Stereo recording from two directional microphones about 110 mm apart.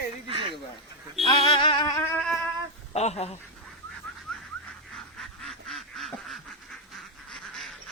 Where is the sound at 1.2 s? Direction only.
55° left (ahead or behind).